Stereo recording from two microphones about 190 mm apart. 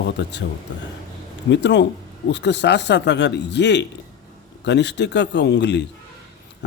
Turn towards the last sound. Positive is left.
turn(degrees=65)  # may be behind; listen again after turning